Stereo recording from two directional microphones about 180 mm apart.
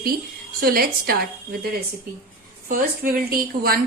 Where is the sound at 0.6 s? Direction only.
55° right (ahead or behind).